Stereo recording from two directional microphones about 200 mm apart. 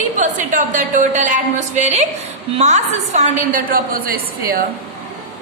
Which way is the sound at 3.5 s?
45° right (ahead or behind).